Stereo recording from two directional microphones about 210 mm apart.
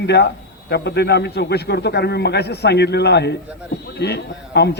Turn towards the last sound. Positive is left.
turn(degrees=50)  # may be behind; listen again after turning